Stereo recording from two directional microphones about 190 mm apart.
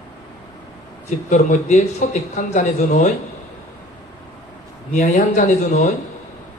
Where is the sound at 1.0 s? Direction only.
40° left (ahead or behind).